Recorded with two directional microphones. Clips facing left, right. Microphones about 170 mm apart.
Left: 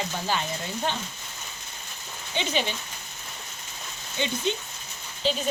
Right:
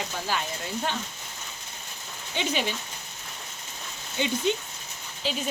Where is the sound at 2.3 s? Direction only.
5° right (ahead or behind).